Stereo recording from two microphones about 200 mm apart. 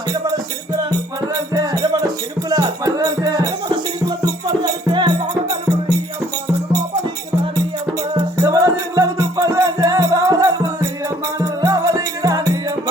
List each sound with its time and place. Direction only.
0.1 s music: 15° right (ahead or behind)
8.1 s music: 15° right (ahead or behind)